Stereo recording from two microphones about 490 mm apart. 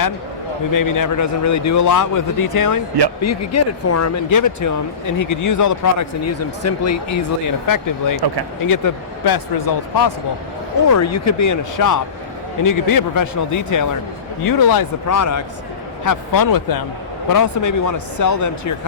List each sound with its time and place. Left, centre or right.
0.7 s a man's voice: left
10.9 s a man's voice: left